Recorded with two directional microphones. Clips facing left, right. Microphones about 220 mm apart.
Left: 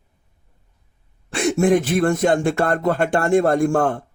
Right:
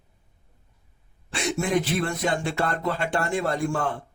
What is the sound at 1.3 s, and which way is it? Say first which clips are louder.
Speech: left 8 dB; 50° left (ahead or behind).